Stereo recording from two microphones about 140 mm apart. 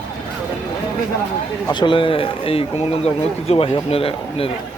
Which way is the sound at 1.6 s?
35° left (ahead or behind).